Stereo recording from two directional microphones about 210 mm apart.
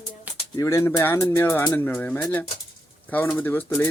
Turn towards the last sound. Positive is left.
turn(degrees=10)  # may be behind; listen again after turning